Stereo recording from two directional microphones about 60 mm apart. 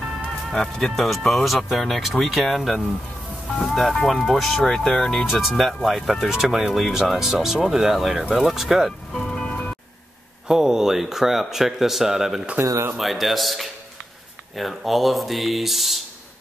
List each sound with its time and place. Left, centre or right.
0.5 s speech: centre
5.2 s speech: centre
9.1 s music: centre
10.5 s speech: centre